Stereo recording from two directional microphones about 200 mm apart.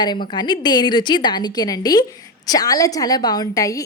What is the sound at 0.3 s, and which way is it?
A woman's voice, 20° left (ahead or behind).